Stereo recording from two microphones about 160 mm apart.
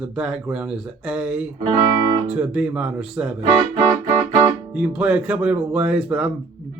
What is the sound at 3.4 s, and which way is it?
Music, 40° right (ahead or behind).